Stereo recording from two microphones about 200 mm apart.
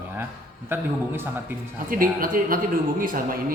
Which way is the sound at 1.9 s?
45° right (ahead or behind).